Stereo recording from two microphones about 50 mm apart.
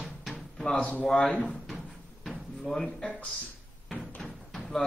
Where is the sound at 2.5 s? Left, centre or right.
Centre.